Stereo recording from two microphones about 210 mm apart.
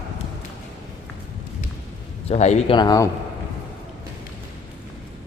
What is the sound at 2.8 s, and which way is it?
Speech, 15° left (ahead or behind).